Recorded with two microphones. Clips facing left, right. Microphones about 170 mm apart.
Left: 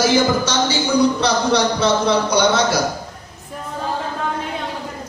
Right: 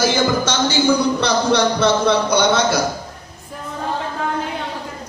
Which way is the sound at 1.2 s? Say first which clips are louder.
Right 1 dB; 55° right (ahead or behind).